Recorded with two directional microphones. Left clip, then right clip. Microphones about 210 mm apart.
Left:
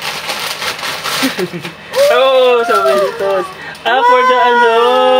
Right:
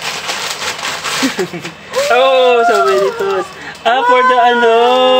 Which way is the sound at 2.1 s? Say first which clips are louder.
Right 3 dB; 10° right (ahead or behind).